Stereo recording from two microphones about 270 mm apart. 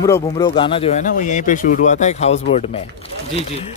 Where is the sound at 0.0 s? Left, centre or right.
Centre.